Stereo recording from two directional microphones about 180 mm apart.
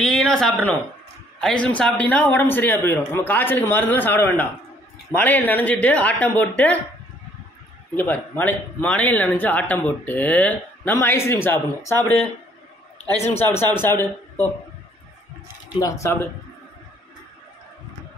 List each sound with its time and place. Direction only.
0.0 s speech: 5° left (ahead or behind)
7.9 s speech: 10° left (ahead or behind)
13.2 s speech: 15° left (ahead or behind)
15.7 s speech: 20° left (ahead or behind)